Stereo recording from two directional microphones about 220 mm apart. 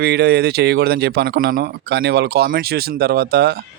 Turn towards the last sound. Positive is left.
turn(degrees=-45)  # may be behind; listen again after turning